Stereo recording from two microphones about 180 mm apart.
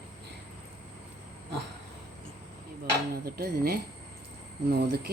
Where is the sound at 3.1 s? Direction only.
60° right (ahead or behind).